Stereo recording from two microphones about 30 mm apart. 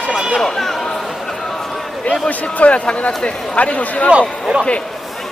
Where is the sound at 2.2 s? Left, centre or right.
Left.